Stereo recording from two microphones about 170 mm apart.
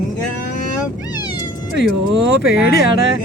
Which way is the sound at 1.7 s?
90° right.